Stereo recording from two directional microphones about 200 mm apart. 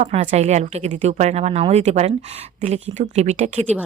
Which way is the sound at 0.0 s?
35° right (ahead or behind).